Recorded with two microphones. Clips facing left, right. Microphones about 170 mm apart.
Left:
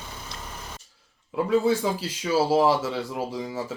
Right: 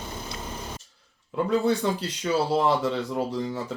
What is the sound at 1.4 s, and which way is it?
Speech, centre (ahead or behind).